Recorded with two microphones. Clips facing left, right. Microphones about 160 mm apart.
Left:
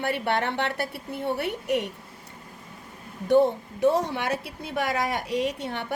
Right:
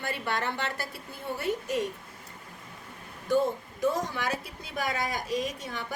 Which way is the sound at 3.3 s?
70° left (ahead or behind).